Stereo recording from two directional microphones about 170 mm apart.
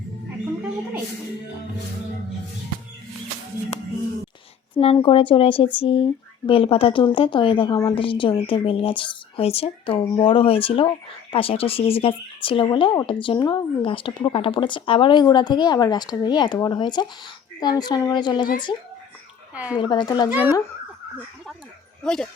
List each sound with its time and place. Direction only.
4.8 s speech: 35° left (ahead or behind)
19.5 s speech: 10° right (ahead or behind)
19.8 s speech: 25° left (ahead or behind)
20.3 s speech: 10° right (ahead or behind)
22.0 s speech: 5° left (ahead or behind)